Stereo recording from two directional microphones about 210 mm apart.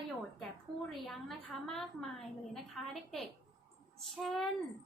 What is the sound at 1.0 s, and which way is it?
A woman's voice, centre (ahead or behind).